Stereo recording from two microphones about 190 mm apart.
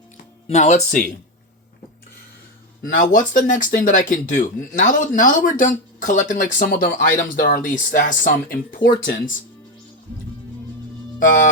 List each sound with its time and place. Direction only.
0.4 s speech: 35° left (ahead or behind)
2.8 s speech: 45° left (ahead or behind)